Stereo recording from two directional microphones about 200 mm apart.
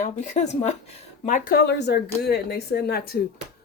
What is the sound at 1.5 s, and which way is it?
Speech, 55° left (ahead or behind).